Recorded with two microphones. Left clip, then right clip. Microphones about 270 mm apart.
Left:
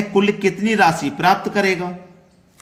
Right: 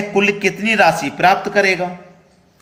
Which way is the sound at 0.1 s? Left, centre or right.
Centre.